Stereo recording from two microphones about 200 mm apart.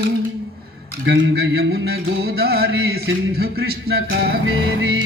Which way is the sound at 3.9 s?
50° right (ahead or behind).